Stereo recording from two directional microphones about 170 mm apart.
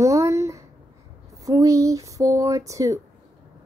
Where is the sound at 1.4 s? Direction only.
20° right (ahead or behind).